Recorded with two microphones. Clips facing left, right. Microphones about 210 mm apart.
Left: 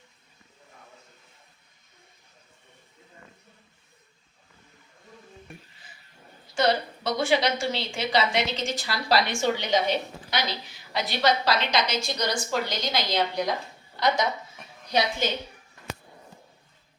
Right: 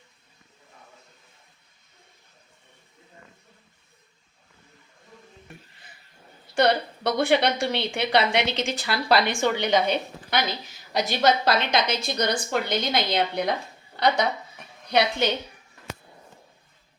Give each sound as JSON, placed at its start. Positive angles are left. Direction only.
{"t": 6.5, "sound": "a woman's voice", "side_deg": -60}
{"t": 14.6, "sound": "a sound", "side_deg": 0}
{"t": 15.2, "sound": "a woman's voice", "side_deg": -65}